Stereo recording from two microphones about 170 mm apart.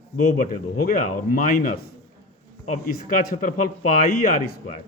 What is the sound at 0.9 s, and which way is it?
Speech, 55° left (ahead or behind).